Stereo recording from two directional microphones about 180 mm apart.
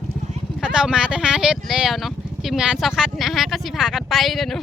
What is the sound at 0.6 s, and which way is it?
Speech, 5° right (ahead or behind).